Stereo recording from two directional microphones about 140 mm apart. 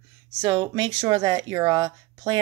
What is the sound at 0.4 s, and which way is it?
Speech, 30° right (ahead or behind).